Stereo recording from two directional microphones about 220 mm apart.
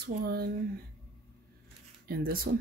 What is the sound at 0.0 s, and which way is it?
Speech, 45° right (ahead or behind).